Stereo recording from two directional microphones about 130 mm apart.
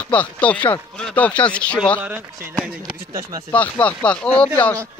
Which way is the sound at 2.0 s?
15° right (ahead or behind).